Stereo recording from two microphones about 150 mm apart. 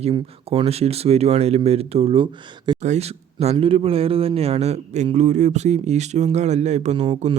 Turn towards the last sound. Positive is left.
turn(degrees=-50)  # may be behind; listen again after turning